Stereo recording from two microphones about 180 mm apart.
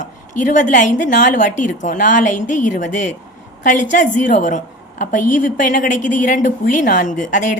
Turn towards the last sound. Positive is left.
turn(degrees=45)  # may be behind; listen again after turning